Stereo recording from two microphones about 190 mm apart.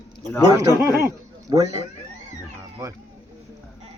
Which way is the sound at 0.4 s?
15° right (ahead or behind).